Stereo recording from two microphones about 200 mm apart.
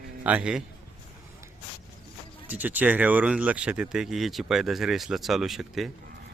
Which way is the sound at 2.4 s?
10° right (ahead or behind).